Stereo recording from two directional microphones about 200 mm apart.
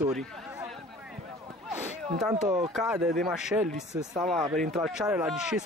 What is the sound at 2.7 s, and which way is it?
Speech, 5° right (ahead or behind).